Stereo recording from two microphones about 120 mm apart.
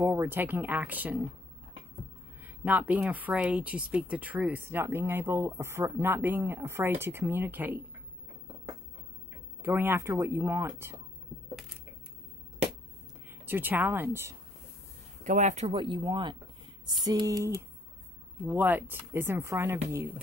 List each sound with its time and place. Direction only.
0.0 s speech: 20° right (ahead or behind)
2.4 s speech: 15° right (ahead or behind)
9.6 s speech: 15° right (ahead or behind)
13.5 s speech: 15° right (ahead or behind)
15.2 s speech: 85° right
15.7 s a sound: 45° right (ahead or behind); by 17.6 s 25° right (ahead or behind)
18.5 s speech: 15° right (ahead or behind)